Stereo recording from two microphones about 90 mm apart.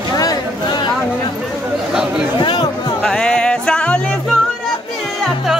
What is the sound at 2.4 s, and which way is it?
Music, 55° left (ahead or behind).